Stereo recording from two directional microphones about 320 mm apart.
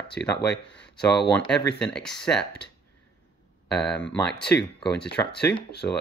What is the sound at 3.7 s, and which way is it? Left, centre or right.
Speech, centre.